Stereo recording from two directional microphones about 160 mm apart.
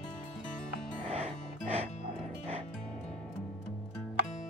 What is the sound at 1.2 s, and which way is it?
Music, 40° right (ahead or behind).